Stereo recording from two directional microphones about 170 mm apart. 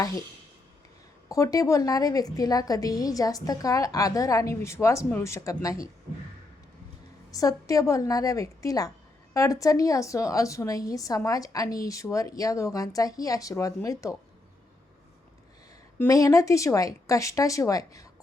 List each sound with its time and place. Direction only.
1.3 s a woman's voice: 20° left (ahead or behind)
7.3 s a woman's voice: 20° left (ahead or behind)
16.0 s a woman's voice: 20° left (ahead or behind)